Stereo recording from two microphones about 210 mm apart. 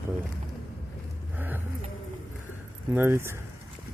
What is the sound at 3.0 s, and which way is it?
Speech, 10° right (ahead or behind).